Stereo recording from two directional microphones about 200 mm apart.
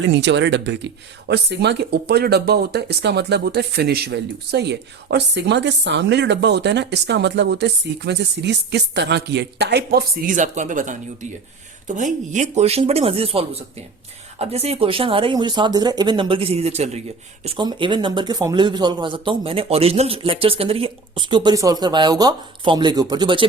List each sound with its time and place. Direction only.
0.1 s speech: 65° right (ahead or behind); by 11.3 s 40° right (ahead or behind)
12.3 s speech: 35° right (ahead or behind)